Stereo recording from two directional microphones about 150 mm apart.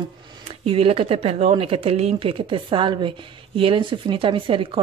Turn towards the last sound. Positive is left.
turn(degrees=-35)  # may be behind; listen again after turning